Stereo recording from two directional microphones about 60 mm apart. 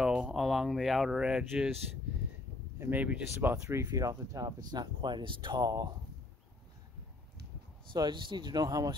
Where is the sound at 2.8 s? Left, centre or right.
Right.